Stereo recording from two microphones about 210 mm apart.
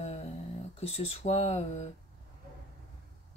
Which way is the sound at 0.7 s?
30° left (ahead or behind).